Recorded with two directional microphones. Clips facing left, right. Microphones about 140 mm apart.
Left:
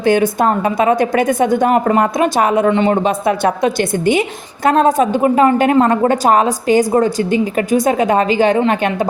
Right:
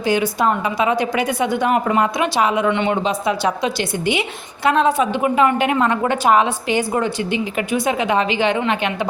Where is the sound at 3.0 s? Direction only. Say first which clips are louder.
Left 5 dB; 50° left (ahead or behind).